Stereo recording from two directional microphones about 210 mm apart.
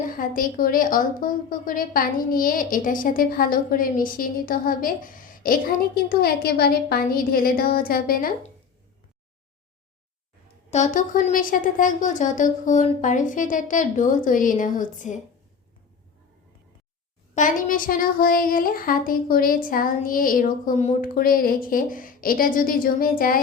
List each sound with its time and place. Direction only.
0.2 s a woman's voice: 40° left (ahead or behind)
10.7 s a woman's voice: 35° left (ahead or behind)
17.3 s a woman's voice: 40° left (ahead or behind)